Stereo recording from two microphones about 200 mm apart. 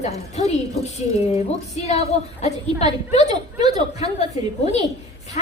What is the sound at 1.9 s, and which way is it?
Speech, 35° left (ahead or behind).